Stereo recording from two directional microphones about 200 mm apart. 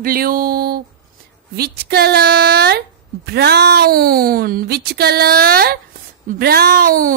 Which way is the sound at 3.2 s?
55° right (ahead or behind).